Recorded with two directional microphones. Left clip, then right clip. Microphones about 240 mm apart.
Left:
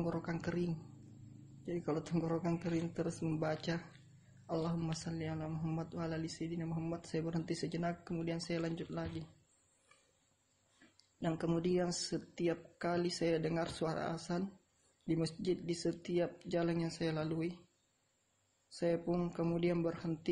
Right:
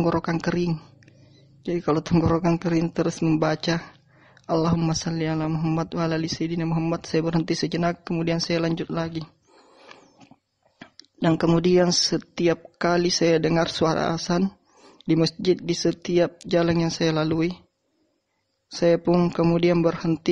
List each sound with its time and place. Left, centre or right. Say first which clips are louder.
0.0 s speech: right 16 dB; right
11.1 s speech: right 16 dB; right
18.7 s speech: right 16 dB; right